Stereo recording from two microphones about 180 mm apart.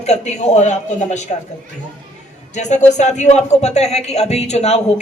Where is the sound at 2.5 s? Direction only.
40° left (ahead or behind).